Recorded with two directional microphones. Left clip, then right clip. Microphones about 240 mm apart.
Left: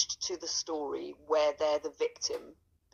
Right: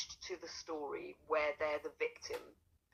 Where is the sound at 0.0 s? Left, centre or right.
Left.